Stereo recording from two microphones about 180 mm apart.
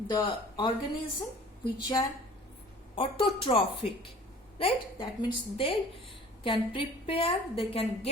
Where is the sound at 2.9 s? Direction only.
30° left (ahead or behind).